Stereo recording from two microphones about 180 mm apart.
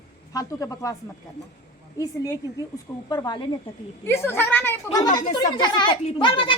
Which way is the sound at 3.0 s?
25° left (ahead or behind).